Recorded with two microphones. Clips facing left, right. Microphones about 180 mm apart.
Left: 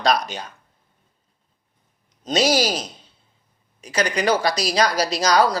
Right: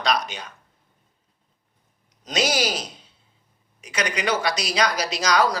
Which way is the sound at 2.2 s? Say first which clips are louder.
Left 4 dB; 30° left (ahead or behind).